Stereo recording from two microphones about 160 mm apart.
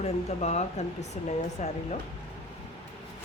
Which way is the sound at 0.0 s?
45° left (ahead or behind).